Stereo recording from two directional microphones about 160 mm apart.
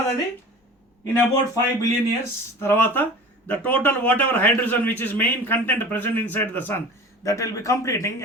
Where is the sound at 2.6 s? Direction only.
15° left (ahead or behind).